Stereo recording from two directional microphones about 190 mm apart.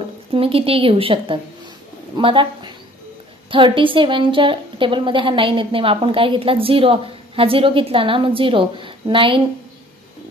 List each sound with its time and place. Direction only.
0.3 s a woman's voice: 30° right (ahead or behind)